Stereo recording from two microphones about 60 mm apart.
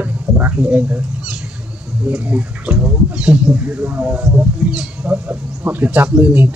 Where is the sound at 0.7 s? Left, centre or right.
Right.